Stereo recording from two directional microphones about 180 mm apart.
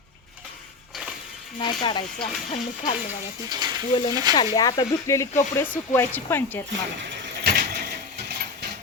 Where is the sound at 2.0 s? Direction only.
45° left (ahead or behind).